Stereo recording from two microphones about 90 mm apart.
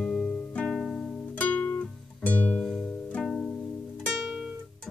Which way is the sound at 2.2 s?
20° left (ahead or behind).